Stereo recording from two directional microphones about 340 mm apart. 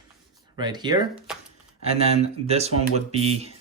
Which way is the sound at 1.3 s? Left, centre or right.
Centre.